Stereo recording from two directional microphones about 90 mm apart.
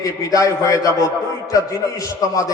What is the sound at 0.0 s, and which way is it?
A man's voice, 40° left (ahead or behind).